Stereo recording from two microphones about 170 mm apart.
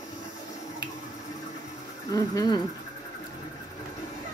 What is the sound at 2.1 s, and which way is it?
Speech, 20° left (ahead or behind).